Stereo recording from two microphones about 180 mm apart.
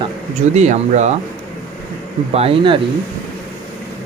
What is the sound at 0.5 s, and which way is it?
Speech, 40° right (ahead or behind).